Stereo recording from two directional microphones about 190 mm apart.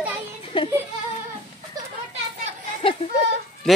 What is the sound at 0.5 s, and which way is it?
Music, 30° left (ahead or behind).